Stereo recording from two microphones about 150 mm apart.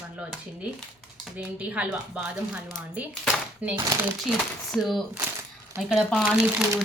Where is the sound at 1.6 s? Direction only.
10° right (ahead or behind).